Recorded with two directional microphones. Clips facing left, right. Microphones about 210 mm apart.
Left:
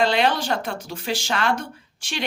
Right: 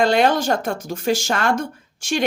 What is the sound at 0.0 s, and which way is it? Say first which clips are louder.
Speech: right 4 dB; 45° right (ahead or behind).